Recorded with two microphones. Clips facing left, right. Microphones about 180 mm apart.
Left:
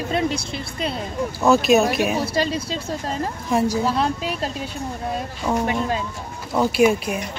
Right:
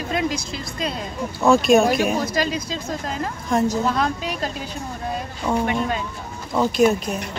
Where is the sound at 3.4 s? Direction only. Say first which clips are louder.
Even; 10° left (ahead or behind).